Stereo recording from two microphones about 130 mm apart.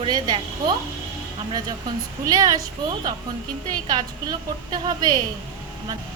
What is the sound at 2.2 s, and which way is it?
Speech, 25° right (ahead or behind).